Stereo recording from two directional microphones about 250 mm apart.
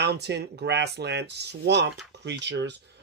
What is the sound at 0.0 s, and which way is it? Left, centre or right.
Speech, right.